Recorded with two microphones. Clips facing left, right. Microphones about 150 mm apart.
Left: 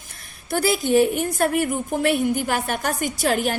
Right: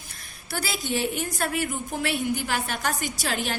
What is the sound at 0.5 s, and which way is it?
A woman's voice, 50° left (ahead or behind).